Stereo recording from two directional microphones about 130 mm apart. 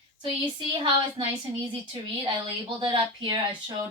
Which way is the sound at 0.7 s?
45° right (ahead or behind).